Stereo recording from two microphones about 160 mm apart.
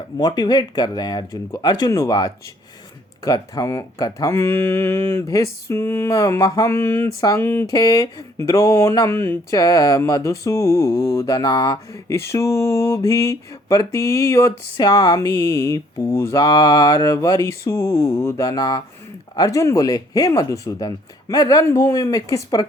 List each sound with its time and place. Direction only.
0.2 s speech: 25° left (ahead or behind)